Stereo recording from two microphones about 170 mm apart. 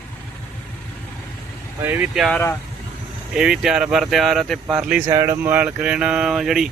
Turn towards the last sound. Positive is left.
turn(degrees=0)  # may be behind; listen again after turning